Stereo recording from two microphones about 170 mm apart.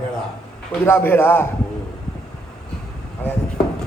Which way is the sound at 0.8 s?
10° left (ahead or behind).